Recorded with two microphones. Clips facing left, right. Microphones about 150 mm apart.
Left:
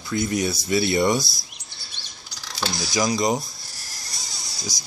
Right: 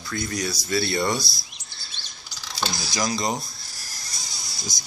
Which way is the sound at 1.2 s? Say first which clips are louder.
Even; 45° left (ahead or behind).